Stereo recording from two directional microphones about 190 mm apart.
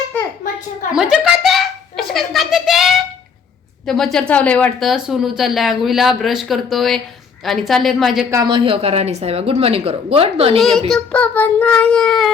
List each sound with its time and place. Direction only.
0.9 s a sound: 5° right (ahead or behind)
3.8 s child singing: centre (ahead or behind)
8.3 s speech: 25° right (ahead or behind)
10.6 s child singing: centre (ahead or behind)